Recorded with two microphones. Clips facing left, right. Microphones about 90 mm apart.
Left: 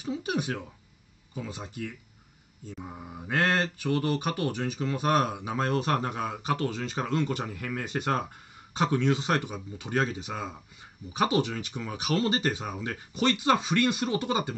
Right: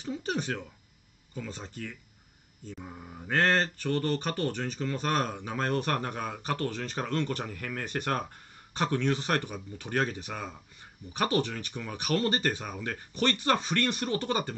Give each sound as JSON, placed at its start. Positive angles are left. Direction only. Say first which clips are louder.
{"t": 0.0, "sound": "speech", "louder": "left 2 dB", "side_deg": 10}
{"t": 1.5, "sound": "mantra", "louder": "left 3 dB", "side_deg": 10}